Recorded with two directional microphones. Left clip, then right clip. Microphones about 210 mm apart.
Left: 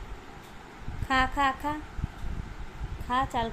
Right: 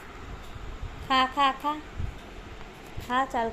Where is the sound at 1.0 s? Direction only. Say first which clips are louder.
Right 2 dB; 25° left (ahead or behind).